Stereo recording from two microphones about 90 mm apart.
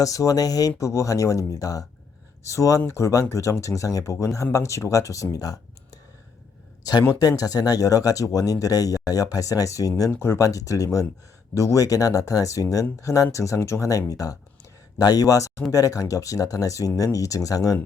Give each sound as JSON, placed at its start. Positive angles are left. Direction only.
{"t": 0.0, "sound": "speech", "side_deg": 40}
{"t": 7.2, "sound": "speech", "side_deg": 45}
{"t": 10.1, "sound": "speech", "side_deg": 30}